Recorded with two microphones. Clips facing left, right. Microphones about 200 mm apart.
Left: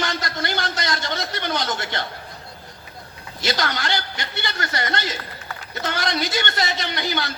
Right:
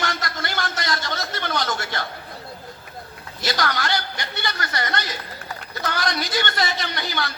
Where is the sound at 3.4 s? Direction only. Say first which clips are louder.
Even; 20° left (ahead or behind).